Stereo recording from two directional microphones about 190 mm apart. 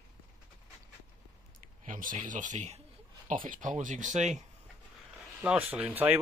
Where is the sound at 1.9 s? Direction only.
45° right (ahead or behind).